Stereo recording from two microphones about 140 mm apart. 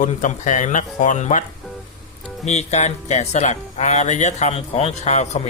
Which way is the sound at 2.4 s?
55° left (ahead or behind).